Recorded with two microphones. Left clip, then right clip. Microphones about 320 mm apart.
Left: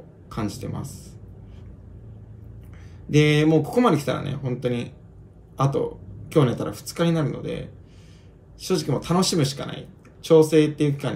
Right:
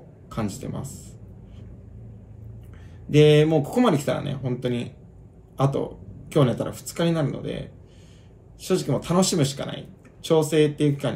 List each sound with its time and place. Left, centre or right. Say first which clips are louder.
0.3 s speech: even; centre
3.1 s speech: right 2 dB; centre